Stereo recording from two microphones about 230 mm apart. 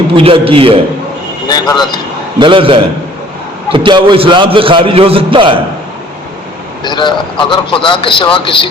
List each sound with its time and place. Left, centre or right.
0.2 s a man's voice: right
1.5 s speech: centre
2.4 s a man's voice: right
6.8 s a man's voice: centre